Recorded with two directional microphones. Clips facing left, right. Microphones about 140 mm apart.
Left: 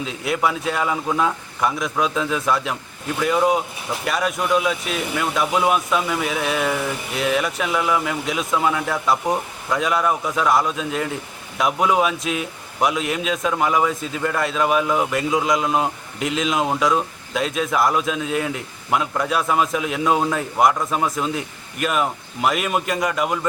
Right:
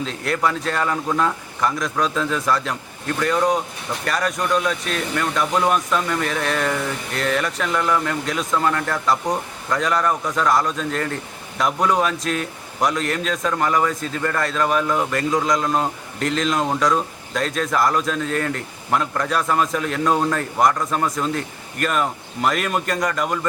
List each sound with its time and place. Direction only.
0.0 s a man's voice: 5° left (ahead or behind)